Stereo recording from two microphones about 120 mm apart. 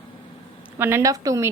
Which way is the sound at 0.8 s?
25° right (ahead or behind).